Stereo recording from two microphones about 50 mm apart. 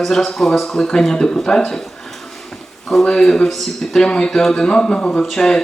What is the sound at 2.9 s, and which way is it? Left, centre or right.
Speech, centre.